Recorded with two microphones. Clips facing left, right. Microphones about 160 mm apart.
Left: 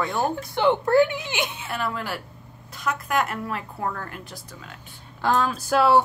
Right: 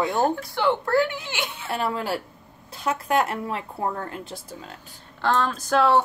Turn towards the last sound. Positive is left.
turn(degrees=10)  # may be behind; listen again after turning